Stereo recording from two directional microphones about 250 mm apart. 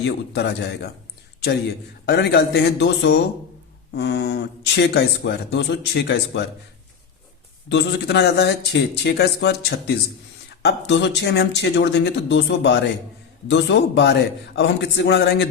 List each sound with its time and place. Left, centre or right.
0.0 s speech: left
2.0 s speech: left
7.7 s speech: left